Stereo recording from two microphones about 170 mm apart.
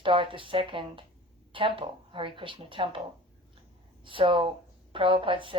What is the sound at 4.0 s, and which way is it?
Speech, 30° right (ahead or behind).